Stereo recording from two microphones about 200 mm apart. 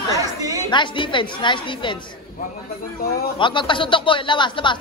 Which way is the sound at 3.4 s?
25° left (ahead or behind).